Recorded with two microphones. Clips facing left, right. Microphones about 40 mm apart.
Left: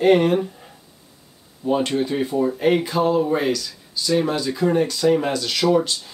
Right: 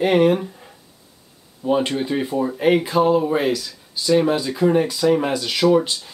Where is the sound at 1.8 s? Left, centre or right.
Centre.